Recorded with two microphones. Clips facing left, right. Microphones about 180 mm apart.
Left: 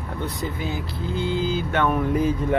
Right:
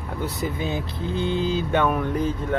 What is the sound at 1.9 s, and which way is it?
Speech, 5° left (ahead or behind).